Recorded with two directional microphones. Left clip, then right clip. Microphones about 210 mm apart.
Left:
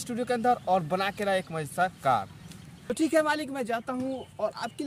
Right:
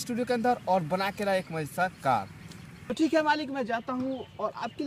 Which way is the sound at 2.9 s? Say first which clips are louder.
Even; 25° left (ahead or behind).